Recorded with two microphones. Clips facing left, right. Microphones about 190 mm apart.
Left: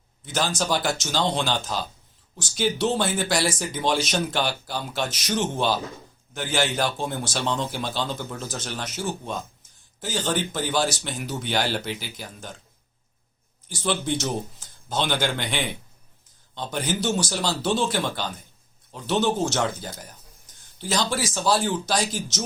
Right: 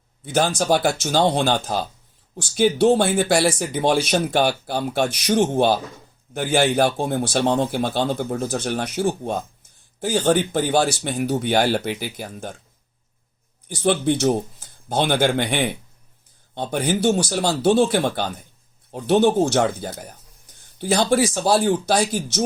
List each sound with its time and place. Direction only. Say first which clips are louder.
0.3 s speech: right 6 dB; 55° right (ahead or behind)
13.7 s speech: right 7 dB; 55° right (ahead or behind)